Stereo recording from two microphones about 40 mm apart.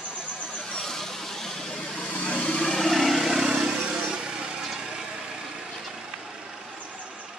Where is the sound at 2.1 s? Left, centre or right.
Left.